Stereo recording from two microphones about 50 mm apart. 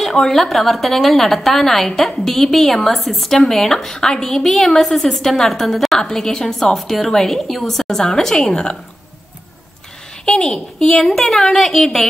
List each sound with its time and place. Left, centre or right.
0.0 s a woman's voice: centre
10.2 s a woman's voice: centre
11.1 s a woman's voice: centre